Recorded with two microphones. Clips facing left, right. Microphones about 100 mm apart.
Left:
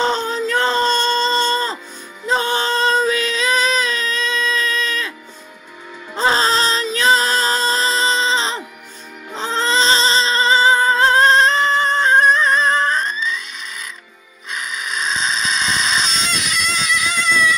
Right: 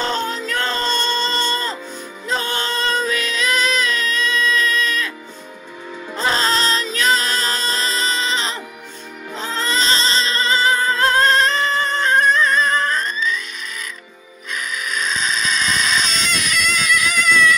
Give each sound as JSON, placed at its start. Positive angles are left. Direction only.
{"t": 0.0, "sound": "music", "side_deg": 30}
{"t": 6.1, "sound": "music", "side_deg": 30}
{"t": 14.5, "sound": "a sound", "side_deg": 25}